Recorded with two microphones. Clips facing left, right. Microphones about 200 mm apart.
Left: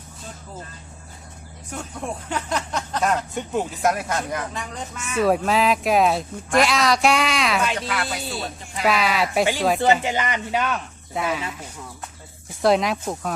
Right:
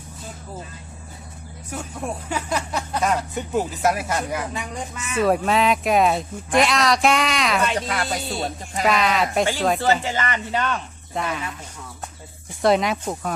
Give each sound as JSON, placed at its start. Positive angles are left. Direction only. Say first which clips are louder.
{"t": 1.7, "sound": "speech", "louder": "right 1 dB", "side_deg": -5}
{"t": 7.8, "sound": "speech", "louder": "right 2 dB", "side_deg": -35}
{"t": 8.8, "sound": "speech", "louder": "right 1 dB", "side_deg": 5}
{"t": 9.8, "sound": "speech", "louder": "left 2 dB", "side_deg": 15}
{"t": 12.6, "sound": "speech", "louder": "even", "side_deg": 0}